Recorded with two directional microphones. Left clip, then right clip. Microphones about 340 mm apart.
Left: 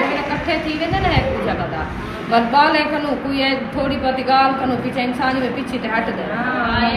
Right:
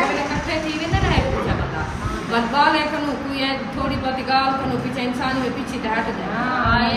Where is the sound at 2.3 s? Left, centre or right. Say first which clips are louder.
Left 4 dB; centre.